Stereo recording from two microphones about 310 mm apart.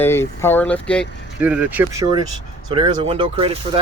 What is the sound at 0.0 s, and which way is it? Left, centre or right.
Speech, centre.